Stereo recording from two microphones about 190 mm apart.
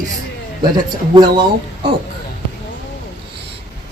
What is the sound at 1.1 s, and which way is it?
Speech, 25° right (ahead or behind).